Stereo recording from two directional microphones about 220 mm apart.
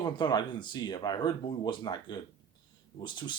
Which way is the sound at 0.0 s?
20° left (ahead or behind).